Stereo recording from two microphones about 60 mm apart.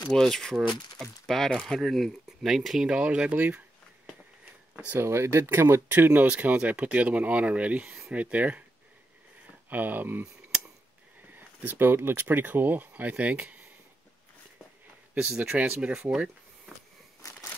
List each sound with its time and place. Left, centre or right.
0.1 s speech: centre
2.9 s speech: centre
5.0 s speech: right
9.7 s speech: right
11.3 s speech: right
15.1 s speech: centre
17.2 s a sound: left